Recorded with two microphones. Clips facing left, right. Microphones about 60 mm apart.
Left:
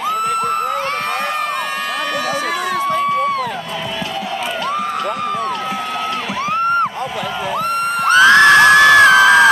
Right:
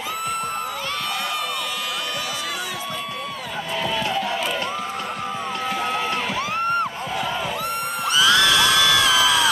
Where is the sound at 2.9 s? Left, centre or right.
Left.